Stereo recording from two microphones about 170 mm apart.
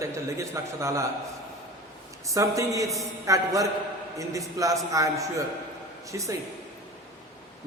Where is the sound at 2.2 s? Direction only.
20° right (ahead or behind).